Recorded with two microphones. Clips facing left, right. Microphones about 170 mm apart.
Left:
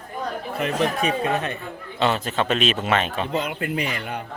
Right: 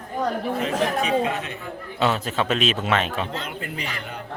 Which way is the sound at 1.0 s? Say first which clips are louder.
Even; 60° left (ahead or behind).